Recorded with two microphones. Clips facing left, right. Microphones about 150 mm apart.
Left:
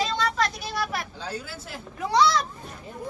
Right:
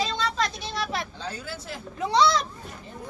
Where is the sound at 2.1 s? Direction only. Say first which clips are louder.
Even; 25° right (ahead or behind).